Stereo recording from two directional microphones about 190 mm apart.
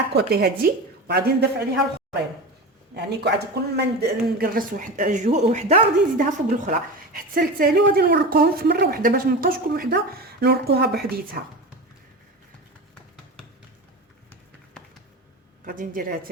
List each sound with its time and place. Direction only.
0.1 s a woman's voice: 60° right (ahead or behind)
2.9 s speech: 60° right (ahead or behind); by 6.2 s 40° right (ahead or behind)
6.7 s speech: 50° right (ahead or behind)
15.6 s speech: 45° right (ahead or behind)